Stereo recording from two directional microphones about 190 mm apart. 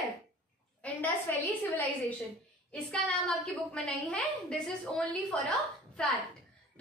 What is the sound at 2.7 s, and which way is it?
A woman's voice, 5° left (ahead or behind).